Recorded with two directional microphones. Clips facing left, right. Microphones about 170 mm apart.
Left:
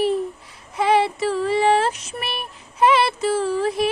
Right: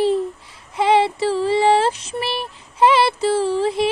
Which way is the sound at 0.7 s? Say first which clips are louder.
Right 2 dB; 25° right (ahead or behind).